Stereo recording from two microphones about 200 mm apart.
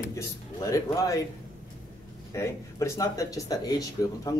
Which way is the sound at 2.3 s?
15° left (ahead or behind).